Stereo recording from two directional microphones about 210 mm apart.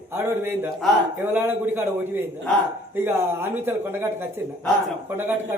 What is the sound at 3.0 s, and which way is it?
Speech, 10° right (ahead or behind).